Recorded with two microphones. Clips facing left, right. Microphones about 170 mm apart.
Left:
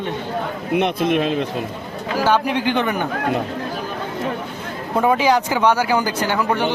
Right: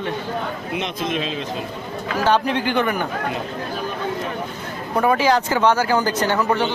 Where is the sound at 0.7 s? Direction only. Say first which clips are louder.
Left 8 dB; 60° left (ahead or behind).